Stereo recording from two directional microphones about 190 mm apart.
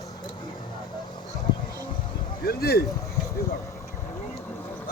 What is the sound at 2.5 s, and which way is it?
Speech, 55° left (ahead or behind).